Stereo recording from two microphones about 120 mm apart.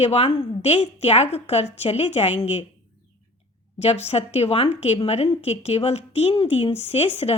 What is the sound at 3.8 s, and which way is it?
A woman's voice, 60° left (ahead or behind).